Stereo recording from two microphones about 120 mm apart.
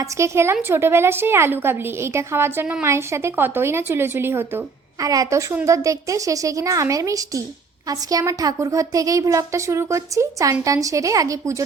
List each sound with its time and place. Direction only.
0.0 s a woman's voice: 20° right (ahead or behind)